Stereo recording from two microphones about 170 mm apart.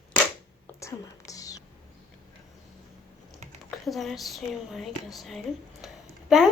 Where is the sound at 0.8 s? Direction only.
20° left (ahead or behind).